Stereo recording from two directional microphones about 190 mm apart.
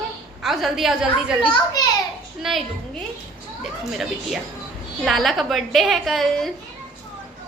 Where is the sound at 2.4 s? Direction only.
Centre (ahead or behind).